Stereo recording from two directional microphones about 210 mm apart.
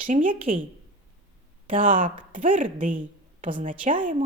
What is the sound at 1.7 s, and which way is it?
A woman's voice, 40° right (ahead or behind).